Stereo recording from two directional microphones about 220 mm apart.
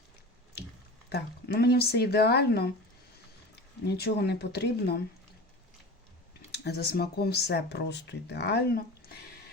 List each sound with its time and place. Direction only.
1.1 s speech: 45° left (ahead or behind)
3.8 s speech: 45° left (ahead or behind)
6.5 s speech: 45° left (ahead or behind)